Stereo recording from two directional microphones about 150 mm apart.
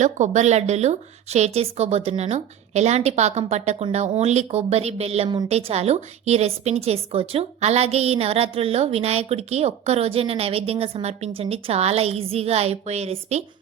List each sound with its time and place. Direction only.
0.0 s a woman's voice: 50° right (ahead or behind)